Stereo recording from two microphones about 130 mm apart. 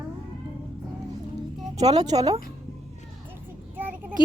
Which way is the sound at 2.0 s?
30° right (ahead or behind).